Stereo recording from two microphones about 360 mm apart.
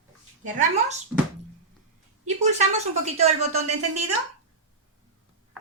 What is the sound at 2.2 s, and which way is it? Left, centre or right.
Speech, centre.